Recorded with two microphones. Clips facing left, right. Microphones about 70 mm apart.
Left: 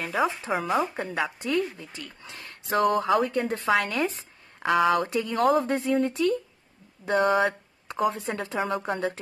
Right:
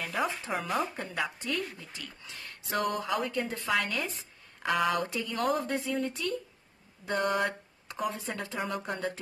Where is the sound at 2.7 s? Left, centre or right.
Left.